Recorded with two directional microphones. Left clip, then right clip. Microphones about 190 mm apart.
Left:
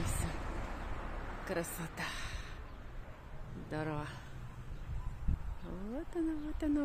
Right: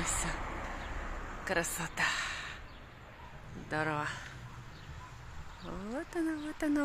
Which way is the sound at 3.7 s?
5° left (ahead or behind).